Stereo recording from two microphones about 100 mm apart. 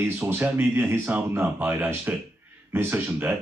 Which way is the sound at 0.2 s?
20° right (ahead or behind).